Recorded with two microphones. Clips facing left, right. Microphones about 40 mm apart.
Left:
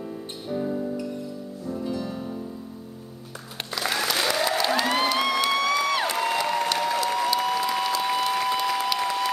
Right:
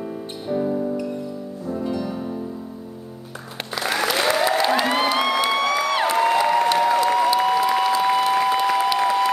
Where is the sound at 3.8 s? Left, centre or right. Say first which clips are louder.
Right 4 dB; centre.